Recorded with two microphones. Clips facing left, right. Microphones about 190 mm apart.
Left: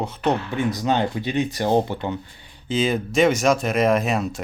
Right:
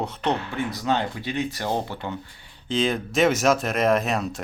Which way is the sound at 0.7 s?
15° left (ahead or behind).